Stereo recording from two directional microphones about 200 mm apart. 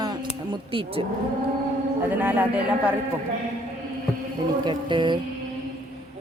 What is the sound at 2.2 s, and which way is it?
Speech, 10° right (ahead or behind).